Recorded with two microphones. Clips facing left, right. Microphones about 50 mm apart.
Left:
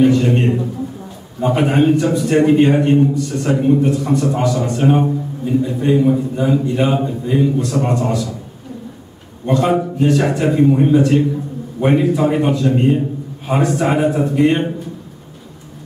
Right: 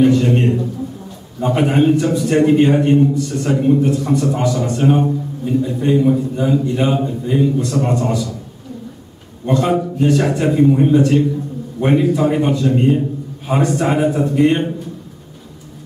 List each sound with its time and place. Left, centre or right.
0.0 s a man's voice: centre
9.5 s a man's voice: centre